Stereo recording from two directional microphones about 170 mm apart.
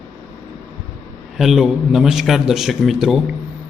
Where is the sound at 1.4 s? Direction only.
Centre (ahead or behind).